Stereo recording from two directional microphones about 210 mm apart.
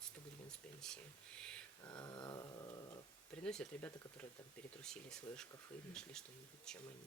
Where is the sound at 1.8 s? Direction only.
20° left (ahead or behind).